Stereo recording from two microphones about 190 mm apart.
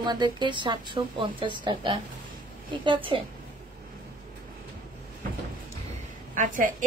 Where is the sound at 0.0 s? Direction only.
20° right (ahead or behind).